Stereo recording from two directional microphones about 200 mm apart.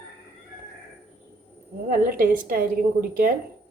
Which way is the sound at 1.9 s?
45° right (ahead or behind).